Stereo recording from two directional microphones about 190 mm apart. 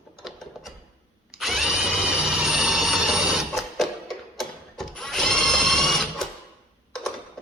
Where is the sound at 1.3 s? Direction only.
Centre (ahead or behind).